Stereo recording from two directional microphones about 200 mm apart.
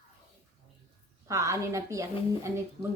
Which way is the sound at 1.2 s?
15° right (ahead or behind).